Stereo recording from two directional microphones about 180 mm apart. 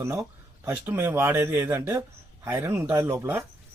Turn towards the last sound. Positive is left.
turn(degrees=-15)  # may be behind; listen again after turning